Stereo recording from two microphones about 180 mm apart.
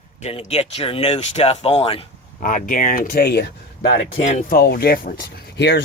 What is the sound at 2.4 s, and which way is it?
Speech, 50° left (ahead or behind).